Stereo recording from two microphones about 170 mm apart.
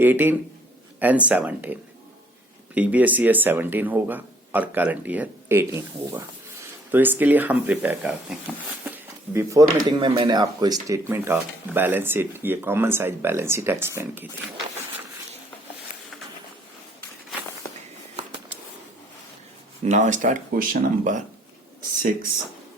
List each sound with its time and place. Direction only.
0.0 s speech: 10° right (ahead or behind)
9.9 s speech: 25° right (ahead or behind)
19.8 s speech: 45° right (ahead or behind)